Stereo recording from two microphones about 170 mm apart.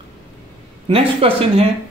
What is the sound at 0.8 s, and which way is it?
Speech, 35° right (ahead or behind).